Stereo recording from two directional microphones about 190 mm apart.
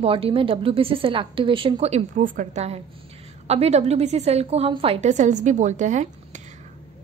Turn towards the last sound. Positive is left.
turn(degrees=-40)  # may be behind; listen again after turning